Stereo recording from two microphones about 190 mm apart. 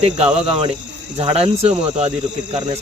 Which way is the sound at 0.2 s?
30° right (ahead or behind).